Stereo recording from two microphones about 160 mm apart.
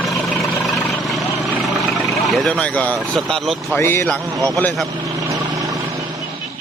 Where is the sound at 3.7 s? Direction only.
15° left (ahead or behind).